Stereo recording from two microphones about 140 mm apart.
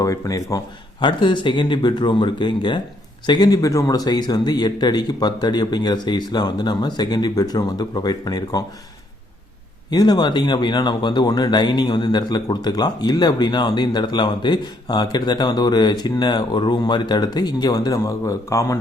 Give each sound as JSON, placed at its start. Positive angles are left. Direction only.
{"t": 0.0, "sound": "speech", "side_deg": 25}
{"t": 9.9, "sound": "speech", "side_deg": 30}